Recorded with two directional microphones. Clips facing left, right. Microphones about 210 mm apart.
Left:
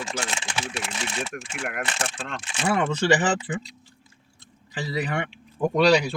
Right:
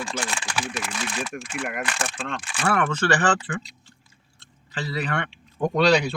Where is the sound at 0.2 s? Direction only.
25° left (ahead or behind).